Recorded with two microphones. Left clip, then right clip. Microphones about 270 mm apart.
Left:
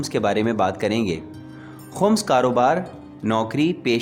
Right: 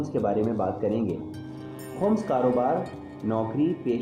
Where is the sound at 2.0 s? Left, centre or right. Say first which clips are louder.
Left 6 dB; left.